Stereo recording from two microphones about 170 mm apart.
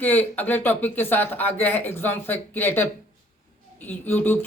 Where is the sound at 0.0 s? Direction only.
10° left (ahead or behind).